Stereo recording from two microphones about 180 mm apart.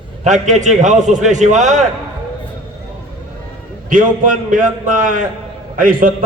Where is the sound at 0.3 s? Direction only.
40° right (ahead or behind).